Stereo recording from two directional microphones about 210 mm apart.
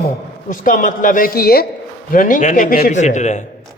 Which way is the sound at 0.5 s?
40° left (ahead or behind).